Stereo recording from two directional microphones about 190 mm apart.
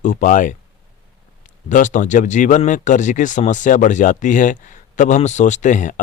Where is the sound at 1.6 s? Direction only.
40° left (ahead or behind).